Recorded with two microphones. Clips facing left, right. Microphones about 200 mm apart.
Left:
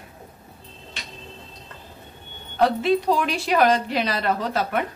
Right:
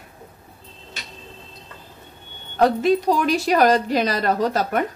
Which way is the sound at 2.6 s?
45° right (ahead or behind).